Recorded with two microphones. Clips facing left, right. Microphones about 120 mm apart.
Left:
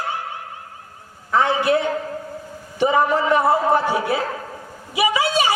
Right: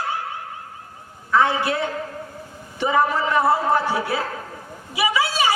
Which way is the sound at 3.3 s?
20° left (ahead or behind).